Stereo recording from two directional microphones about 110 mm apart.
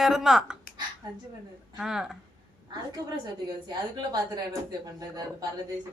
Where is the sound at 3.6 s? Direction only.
35° right (ahead or behind).